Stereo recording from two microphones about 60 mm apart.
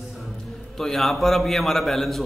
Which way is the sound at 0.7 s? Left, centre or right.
Centre.